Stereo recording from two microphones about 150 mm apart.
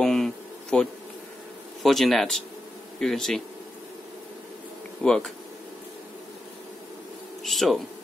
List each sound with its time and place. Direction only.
0.0 s a sound: 5° left (ahead or behind)
1.8 s speech: centre (ahead or behind)
5.0 s speech: 5° left (ahead or behind)
7.4 s bee: centre (ahead or behind)